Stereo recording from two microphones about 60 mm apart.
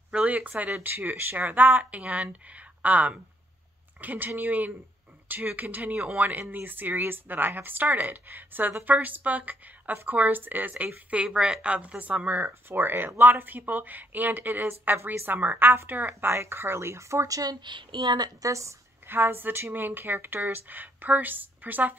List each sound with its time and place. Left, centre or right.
0.1 s speech: right
11.2 s a woman's voice: centre; by 17.4 s right
18.4 s speech: right
19.0 s speech: right